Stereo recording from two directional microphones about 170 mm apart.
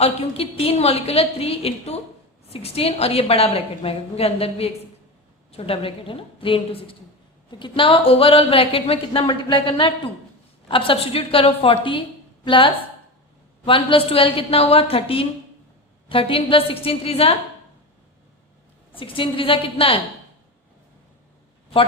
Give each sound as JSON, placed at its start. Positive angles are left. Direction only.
{"t": 0.0, "sound": "a woman's voice", "side_deg": 35}
{"t": 18.9, "sound": "a woman's voice", "side_deg": 30}